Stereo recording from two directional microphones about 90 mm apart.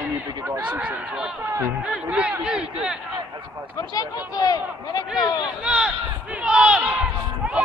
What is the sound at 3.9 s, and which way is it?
Speech, 45° left (ahead or behind).